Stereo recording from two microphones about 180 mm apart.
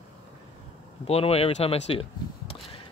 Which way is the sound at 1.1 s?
35° left (ahead or behind).